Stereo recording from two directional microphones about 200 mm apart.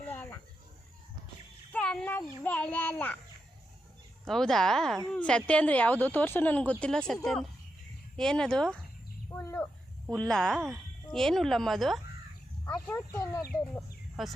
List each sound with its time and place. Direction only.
0.0 s a sound: 10° left (ahead or behind)
1.7 s cat: 5° left (ahead or behind)
2.4 s speech: 5° left (ahead or behind)
4.3 s speech: 5° left (ahead or behind)
9.3 s bird: 10° left (ahead or behind)
10.1 s speech: 5° left (ahead or behind)
12.9 s speech: 15° left (ahead or behind)
14.2 s speech: centre (ahead or behind)